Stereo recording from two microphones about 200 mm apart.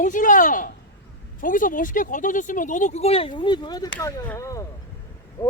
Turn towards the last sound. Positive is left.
turn(degrees=15)  # may be behind; listen again after turning